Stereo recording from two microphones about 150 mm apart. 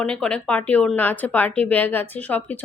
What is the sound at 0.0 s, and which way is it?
Speech, 5° left (ahead or behind).